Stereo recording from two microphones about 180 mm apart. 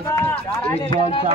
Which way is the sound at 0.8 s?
30° left (ahead or behind).